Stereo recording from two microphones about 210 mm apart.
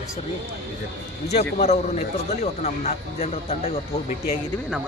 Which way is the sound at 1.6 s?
30° left (ahead or behind).